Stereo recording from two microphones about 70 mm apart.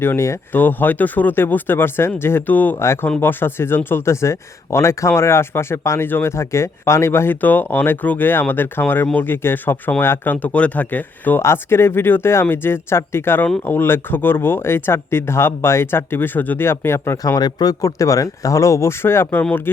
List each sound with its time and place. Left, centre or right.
0.0 s speech: left
0.5 s speech: left
2.7 s speech: left
10.4 s speech: left
11.4 s speech: left
17.2 s speech: left
17.8 s speech: left